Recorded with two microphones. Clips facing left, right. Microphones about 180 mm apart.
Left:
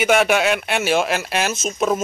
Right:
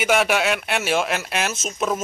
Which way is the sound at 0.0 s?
Centre (ahead or behind).